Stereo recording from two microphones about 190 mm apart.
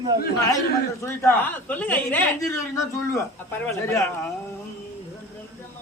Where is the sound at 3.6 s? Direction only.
15° left (ahead or behind).